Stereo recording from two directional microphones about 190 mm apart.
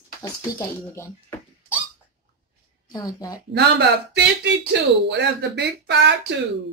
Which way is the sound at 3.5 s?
60° right (ahead or behind).